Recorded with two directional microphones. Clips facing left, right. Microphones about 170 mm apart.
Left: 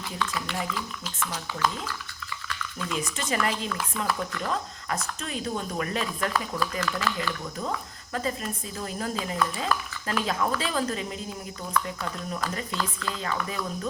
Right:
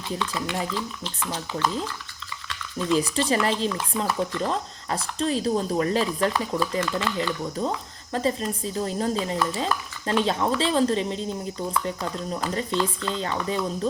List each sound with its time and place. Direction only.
1.3 s speech: 30° right (ahead or behind)